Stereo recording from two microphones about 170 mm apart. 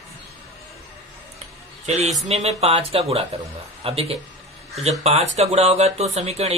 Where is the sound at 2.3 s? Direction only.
35° right (ahead or behind).